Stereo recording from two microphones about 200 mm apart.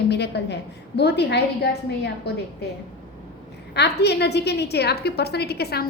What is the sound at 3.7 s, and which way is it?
A woman's voice, 55° left (ahead or behind).